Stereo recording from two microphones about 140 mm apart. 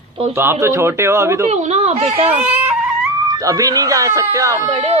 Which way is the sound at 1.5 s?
50° right (ahead or behind).